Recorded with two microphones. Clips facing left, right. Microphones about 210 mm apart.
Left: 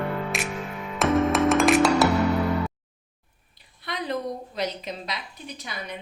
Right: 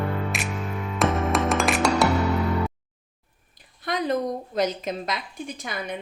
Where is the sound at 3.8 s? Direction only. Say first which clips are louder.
Right 4 dB; 45° right (ahead or behind).